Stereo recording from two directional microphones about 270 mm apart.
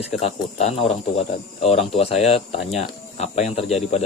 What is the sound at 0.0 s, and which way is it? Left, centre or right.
Speech, left.